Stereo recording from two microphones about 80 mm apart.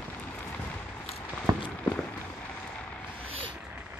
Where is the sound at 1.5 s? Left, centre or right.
Right.